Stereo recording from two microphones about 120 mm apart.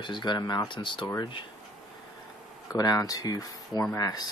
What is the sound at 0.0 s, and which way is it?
Speech, 40° left (ahead or behind).